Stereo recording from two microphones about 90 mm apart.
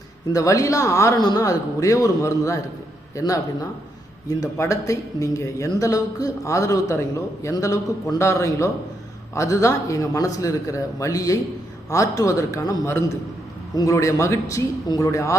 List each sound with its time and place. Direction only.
0.3 s a man's voice: 40° left (ahead or behind)